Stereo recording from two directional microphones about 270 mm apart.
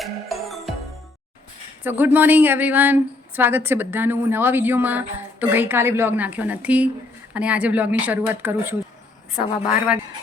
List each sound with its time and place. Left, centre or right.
0.0 s music: centre
1.8 s a woman's voice: centre